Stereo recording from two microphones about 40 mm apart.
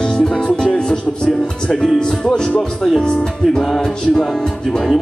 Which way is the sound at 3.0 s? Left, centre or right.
Centre.